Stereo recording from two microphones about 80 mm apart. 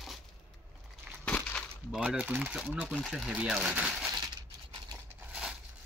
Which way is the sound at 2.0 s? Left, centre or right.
Centre.